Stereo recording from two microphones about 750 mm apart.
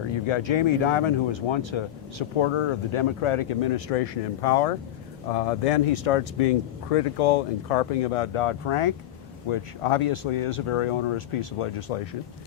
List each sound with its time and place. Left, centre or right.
0.1 s speech: left